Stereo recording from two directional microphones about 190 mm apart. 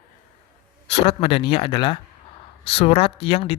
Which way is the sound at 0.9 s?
35° left (ahead or behind).